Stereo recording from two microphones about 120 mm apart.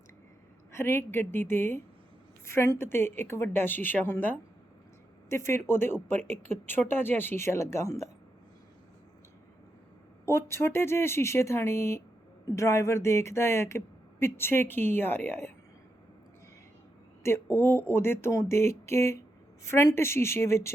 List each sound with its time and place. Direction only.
0.7 s speech: 20° left (ahead or behind)
10.2 s speech: 20° left (ahead or behind)
17.2 s speech: 20° left (ahead or behind)